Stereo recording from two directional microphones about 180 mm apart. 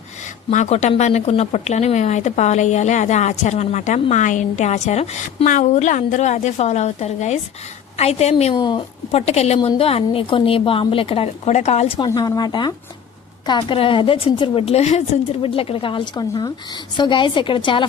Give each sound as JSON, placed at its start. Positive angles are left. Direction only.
{"t": 0.5, "sound": "speech", "side_deg": 40}
{"t": 8.5, "sound": "a woman's voice", "side_deg": 25}
{"t": 9.1, "sound": "speech", "side_deg": 35}
{"t": 12.0, "sound": "a woman's voice", "side_deg": 20}